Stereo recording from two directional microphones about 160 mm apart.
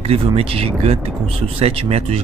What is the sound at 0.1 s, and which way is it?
Speech, 40° right (ahead or behind).